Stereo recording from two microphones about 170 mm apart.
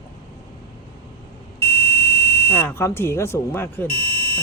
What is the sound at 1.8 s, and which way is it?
Buzzer, 15° left (ahead or behind).